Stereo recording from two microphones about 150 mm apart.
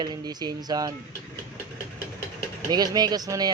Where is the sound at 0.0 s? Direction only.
25° right (ahead or behind).